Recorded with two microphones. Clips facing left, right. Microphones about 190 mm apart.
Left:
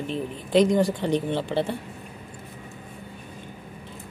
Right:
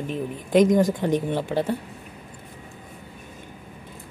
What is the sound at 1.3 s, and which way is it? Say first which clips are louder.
Speech: right 1 dB; 10° right (ahead or behind).